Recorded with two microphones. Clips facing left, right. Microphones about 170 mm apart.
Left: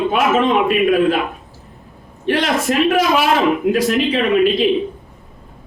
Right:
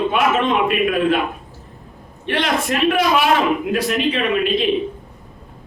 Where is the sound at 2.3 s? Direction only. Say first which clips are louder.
Left 3 dB; 40° left (ahead or behind).